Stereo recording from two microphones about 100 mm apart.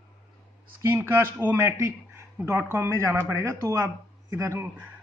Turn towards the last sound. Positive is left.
turn(degrees=-30)  # may be behind; listen again after turning